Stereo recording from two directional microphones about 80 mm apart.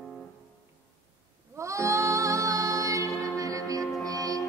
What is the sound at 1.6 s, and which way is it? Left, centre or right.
Music, right.